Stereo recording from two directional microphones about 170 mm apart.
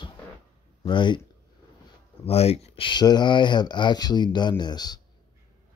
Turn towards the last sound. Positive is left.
turn(degrees=25)  # may be behind; listen again after turning